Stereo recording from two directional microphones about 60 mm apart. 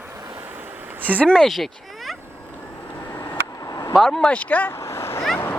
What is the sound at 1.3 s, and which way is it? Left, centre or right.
Speech, centre.